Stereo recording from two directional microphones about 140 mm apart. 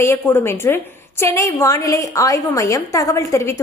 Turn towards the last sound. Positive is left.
turn(degrees=20)  # may be behind; listen again after turning